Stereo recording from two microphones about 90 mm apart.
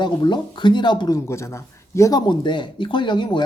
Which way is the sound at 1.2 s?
30° left (ahead or behind).